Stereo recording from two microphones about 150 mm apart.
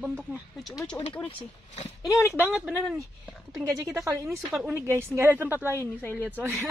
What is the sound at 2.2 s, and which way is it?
Speech, 15° left (ahead or behind).